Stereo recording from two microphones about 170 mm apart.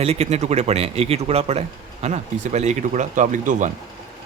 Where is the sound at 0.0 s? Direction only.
40° right (ahead or behind).